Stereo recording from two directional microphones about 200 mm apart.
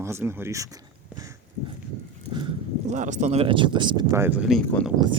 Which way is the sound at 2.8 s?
35° right (ahead or behind).